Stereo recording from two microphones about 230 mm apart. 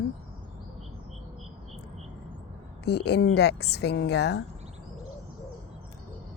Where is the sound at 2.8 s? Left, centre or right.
Left.